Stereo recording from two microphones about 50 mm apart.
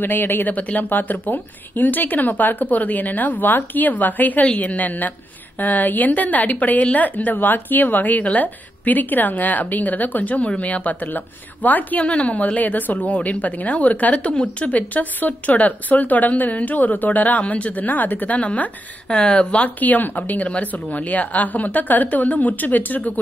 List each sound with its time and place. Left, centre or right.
0.0 s a woman's voice: left
18.4 s speech: left
19.8 s a woman's voice: left